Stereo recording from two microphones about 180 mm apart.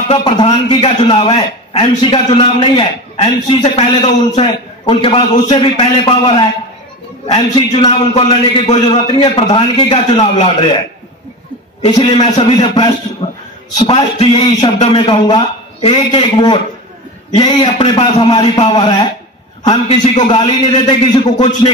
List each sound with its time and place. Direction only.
0.1 s a man's voice: 25° left (ahead or behind)
11.8 s a man's voice: 30° left (ahead or behind)
13.2 s a sound: 30° left (ahead or behind)
13.7 s a man's voice: 25° left (ahead or behind)